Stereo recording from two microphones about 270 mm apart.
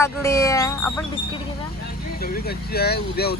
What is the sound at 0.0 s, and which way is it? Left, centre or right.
Speech, centre.